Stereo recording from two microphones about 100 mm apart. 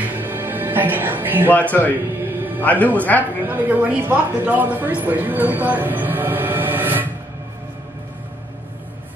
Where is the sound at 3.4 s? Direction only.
20° right (ahead or behind).